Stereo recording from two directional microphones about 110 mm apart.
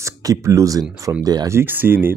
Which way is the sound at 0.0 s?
30° right (ahead or behind).